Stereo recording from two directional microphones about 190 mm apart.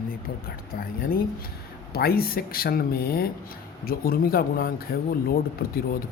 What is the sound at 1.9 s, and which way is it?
Speech, 55° left (ahead or behind).